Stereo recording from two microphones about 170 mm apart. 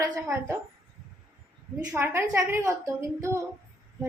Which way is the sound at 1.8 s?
15° right (ahead or behind).